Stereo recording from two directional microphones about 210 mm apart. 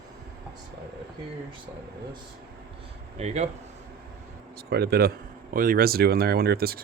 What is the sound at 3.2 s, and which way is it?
Speech, 30° right (ahead or behind).